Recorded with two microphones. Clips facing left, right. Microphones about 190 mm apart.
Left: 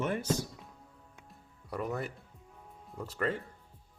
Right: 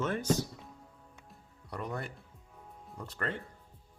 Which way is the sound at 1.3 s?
5° left (ahead or behind).